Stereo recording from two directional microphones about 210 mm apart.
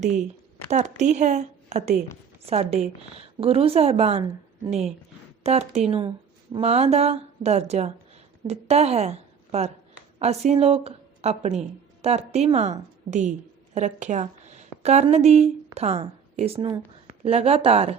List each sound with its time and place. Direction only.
0.0 s a woman's voice: 35° right (ahead or behind)
5.4 s a woman's voice: 30° right (ahead or behind)